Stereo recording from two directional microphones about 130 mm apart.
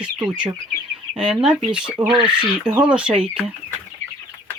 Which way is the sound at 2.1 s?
35° right (ahead or behind).